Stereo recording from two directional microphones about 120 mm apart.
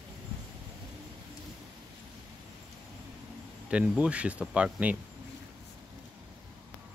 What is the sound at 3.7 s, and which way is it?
Speech, 10° right (ahead or behind).